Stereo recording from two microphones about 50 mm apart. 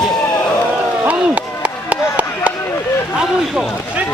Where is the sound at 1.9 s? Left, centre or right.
Right.